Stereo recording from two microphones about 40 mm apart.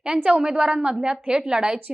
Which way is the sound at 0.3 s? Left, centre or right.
Right.